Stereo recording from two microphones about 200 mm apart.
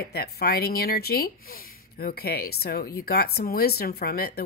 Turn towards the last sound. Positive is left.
turn(degrees=50)  # may be behind; listen again after turning